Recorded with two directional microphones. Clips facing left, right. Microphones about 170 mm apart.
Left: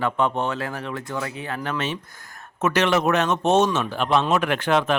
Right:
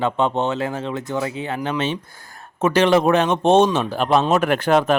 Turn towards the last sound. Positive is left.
turn(degrees=-40)  # may be behind; listen again after turning